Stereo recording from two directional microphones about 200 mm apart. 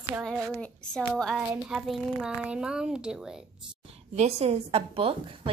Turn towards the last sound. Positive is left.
turn(degrees=-30)  # may be behind; listen again after turning